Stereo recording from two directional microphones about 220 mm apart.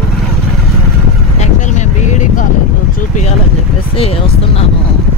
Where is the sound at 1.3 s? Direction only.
30° left (ahead or behind).